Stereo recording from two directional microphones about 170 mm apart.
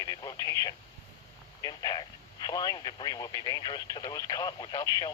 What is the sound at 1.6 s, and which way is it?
Speech, 25° left (ahead or behind).